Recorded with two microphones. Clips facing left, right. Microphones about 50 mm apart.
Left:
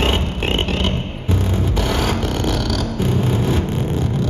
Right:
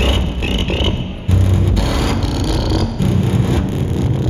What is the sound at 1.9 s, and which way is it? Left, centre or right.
Vehicle, left.